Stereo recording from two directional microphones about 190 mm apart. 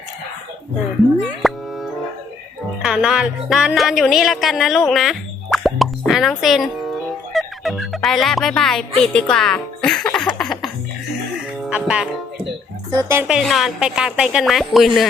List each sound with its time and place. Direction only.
1.4 s music: centre (ahead or behind)
7.3 s speech: centre (ahead or behind)
9.3 s music: 5° left (ahead or behind)
13.0 s speech: 15° right (ahead or behind)
13.2 s speech: centre (ahead or behind)